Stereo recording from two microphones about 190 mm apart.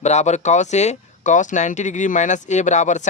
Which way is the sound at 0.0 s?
35° left (ahead or behind).